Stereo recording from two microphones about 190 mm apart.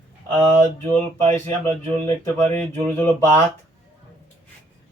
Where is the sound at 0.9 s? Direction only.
10° left (ahead or behind).